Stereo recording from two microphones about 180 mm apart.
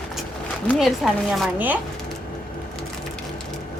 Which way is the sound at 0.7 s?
Centre (ahead or behind).